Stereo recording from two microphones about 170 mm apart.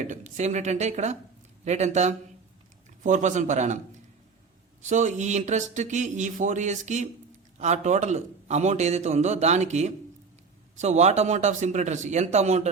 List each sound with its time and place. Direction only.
0.0 s a man's voice: 45° right (ahead or behind)
4.8 s a man's voice: 45° right (ahead or behind)